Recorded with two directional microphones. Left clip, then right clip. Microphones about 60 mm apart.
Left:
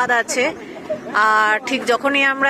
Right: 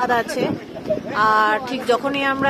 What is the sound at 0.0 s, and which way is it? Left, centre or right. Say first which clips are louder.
A woman's voice: left 2 dB; centre.